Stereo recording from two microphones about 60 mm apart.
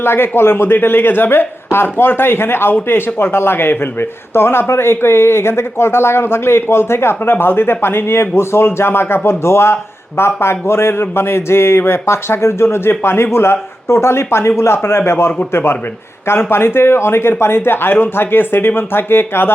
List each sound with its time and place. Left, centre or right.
0.0 s speech: left